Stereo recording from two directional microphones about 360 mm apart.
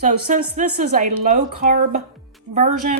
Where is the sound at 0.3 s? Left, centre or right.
Right.